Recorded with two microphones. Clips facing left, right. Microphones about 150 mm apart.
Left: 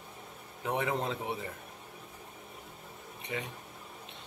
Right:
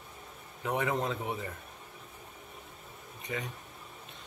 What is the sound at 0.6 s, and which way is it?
Speech, 30° left (ahead or behind).